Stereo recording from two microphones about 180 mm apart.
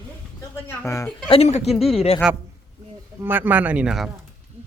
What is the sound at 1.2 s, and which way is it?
Speech, 30° left (ahead or behind).